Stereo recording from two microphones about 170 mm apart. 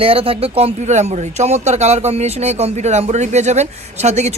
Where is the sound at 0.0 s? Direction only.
35° right (ahead or behind).